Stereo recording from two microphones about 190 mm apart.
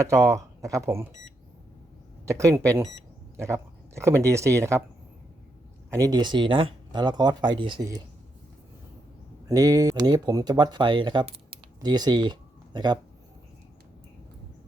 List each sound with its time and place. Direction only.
0.0 s speech: 15° right (ahead or behind)
2.2 s speech: 15° right (ahead or behind)
5.9 s speech: 20° right (ahead or behind)
9.5 s speech: 20° right (ahead or behind)